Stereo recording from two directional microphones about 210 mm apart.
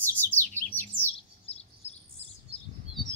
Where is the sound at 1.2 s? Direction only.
30° left (ahead or behind).